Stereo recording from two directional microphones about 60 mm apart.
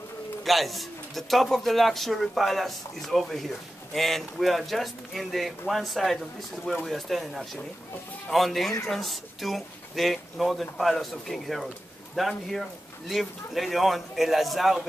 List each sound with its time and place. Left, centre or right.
0.4 s a man's voice: centre